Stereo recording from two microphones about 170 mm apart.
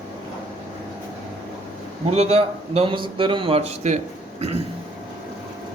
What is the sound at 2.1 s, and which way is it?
A man's voice, 40° right (ahead or behind).